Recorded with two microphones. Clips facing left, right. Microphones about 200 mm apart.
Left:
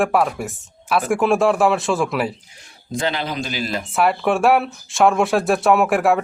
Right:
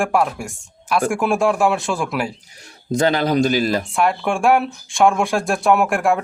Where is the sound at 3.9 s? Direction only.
5° left (ahead or behind).